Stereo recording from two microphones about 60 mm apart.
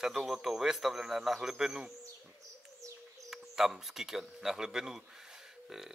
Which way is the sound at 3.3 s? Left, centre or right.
Centre.